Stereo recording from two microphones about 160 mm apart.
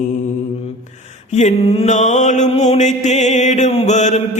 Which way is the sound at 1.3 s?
45° left (ahead or behind).